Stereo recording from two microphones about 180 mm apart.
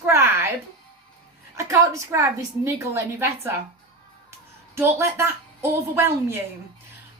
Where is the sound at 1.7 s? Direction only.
15° right (ahead or behind).